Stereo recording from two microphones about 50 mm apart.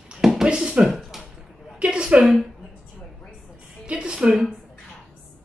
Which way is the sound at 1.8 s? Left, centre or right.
Right.